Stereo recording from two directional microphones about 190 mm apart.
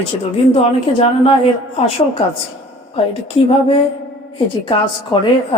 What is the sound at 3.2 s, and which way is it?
Speech, 30° left (ahead or behind).